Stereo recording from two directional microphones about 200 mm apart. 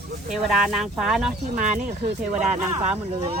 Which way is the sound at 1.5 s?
35° right (ahead or behind).